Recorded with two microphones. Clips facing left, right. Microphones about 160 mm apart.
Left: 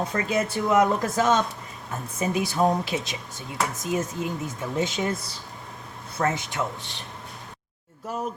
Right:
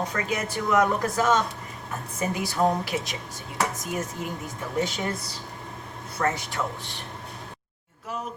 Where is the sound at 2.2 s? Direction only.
20° left (ahead or behind).